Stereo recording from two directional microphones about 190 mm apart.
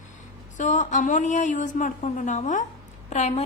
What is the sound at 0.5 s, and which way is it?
A woman's voice, 40° left (ahead or behind).